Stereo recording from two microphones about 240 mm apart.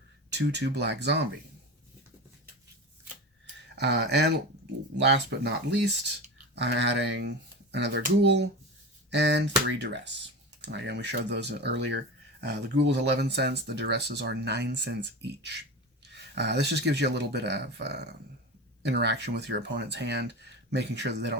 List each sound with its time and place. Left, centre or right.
0.3 s speech: right
3.8 s speech: right